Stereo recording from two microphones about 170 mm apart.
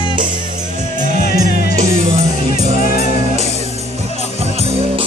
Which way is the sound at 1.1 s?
45° right (ahead or behind).